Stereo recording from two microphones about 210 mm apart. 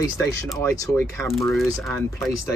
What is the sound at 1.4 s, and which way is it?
Speech, centre (ahead or behind).